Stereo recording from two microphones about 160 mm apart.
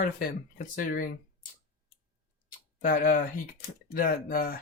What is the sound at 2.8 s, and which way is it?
Speech, 60° left (ahead or behind).